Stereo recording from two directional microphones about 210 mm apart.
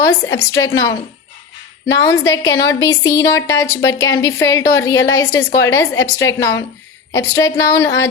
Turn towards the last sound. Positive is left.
turn(degrees=15)  # may be behind; listen again after turning